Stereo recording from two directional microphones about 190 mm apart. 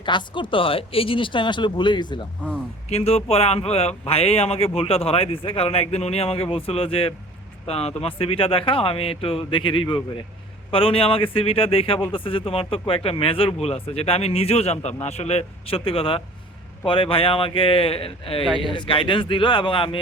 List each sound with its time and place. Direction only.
0.0 s speech: 25° left (ahead or behind)